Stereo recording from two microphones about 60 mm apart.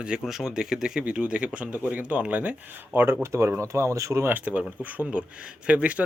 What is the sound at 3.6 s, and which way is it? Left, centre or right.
Speech, right.